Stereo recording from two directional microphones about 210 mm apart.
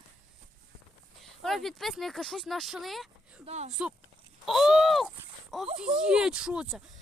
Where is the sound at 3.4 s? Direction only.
30° right (ahead or behind).